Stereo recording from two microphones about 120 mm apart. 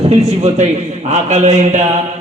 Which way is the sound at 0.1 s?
60° right (ahead or behind).